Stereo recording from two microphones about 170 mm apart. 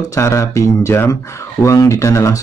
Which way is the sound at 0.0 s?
20° left (ahead or behind).